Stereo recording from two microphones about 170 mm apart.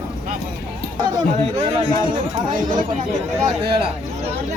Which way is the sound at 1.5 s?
35° right (ahead or behind).